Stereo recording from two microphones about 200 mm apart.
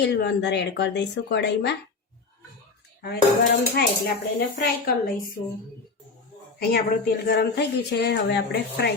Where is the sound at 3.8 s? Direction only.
50° left (ahead or behind).